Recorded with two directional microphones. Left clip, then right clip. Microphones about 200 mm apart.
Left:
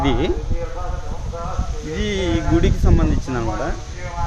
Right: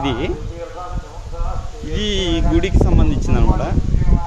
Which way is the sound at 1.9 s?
5° right (ahead or behind).